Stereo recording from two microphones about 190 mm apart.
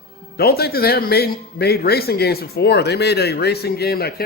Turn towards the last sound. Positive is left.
turn(degrees=55)  # may be behind; listen again after turning